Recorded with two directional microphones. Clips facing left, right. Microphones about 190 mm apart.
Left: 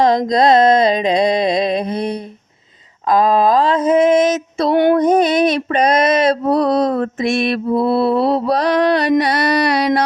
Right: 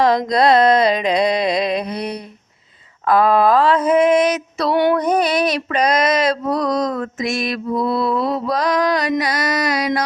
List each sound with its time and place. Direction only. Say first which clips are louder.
0.3 s female singing: left 2 dB; 25° left (ahead or behind)
3.1 s mantra: left 1 dB; 15° left (ahead or behind)
4.7 s female singing: left 3 dB; 50° left (ahead or behind)
4.9 s female singing: left 4 dB; 25° left (ahead or behind)
7.5 s mantra: left 4 dB; 30° left (ahead or behind)